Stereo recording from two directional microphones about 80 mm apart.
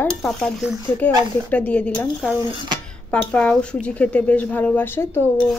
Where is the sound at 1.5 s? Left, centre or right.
Centre.